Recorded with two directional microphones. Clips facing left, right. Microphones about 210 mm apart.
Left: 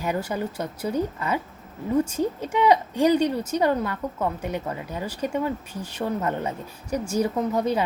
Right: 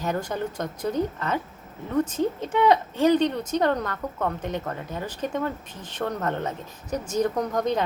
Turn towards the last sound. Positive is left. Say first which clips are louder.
# left 1 dB
turn(degrees=10)  # may be behind; listen again after turning